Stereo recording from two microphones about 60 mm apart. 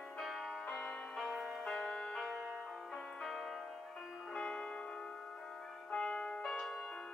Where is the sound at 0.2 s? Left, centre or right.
Centre.